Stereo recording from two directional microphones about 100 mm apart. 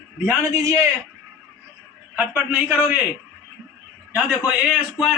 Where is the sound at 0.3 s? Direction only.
30° right (ahead or behind).